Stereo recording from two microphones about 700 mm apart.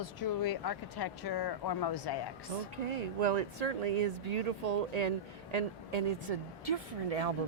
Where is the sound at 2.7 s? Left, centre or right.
Right.